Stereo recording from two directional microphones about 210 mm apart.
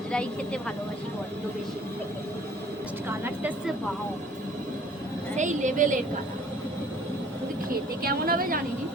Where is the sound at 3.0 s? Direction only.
10° right (ahead or behind).